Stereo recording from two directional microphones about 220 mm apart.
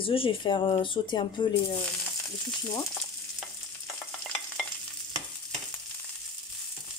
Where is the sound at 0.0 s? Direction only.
25° left (ahead or behind).